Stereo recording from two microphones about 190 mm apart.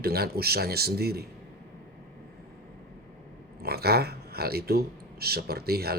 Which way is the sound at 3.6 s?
55° right (ahead or behind).